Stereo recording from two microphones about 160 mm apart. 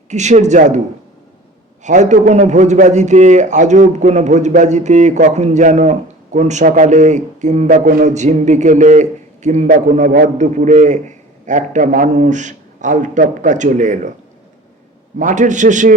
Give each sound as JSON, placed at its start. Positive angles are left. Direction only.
{"t": 0.1, "sound": "a man's voice", "side_deg": -45}
{"t": 1.8, "sound": "a man's voice", "side_deg": -50}
{"t": 7.9, "sound": "a man's voice", "side_deg": -65}
{"t": 8.1, "sound": "a man's voice", "side_deg": -45}
{"t": 10.0, "sound": "a man's voice", "side_deg": -80}
{"t": 10.3, "sound": "a man's voice", "side_deg": -50}
{"t": 15.2, "sound": "a man's voice", "side_deg": -50}